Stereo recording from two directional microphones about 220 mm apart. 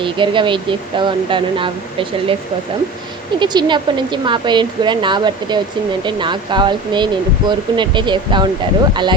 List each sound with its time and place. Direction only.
0.0 s speech: 20° right (ahead or behind)
3.4 s speech: 20° right (ahead or behind)